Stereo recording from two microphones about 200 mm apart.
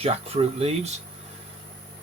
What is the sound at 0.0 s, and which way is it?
Speech, 30° right (ahead or behind).